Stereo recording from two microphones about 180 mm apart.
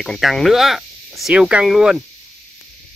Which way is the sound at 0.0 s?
Centre (ahead or behind).